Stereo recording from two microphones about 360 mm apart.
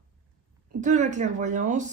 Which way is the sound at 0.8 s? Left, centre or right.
Centre.